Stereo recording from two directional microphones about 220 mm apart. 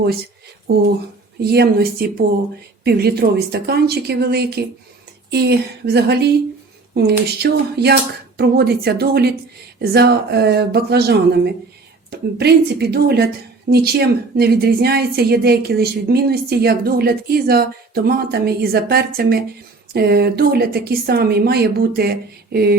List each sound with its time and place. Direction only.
1.4 s a woman's voice: 45° right (ahead or behind)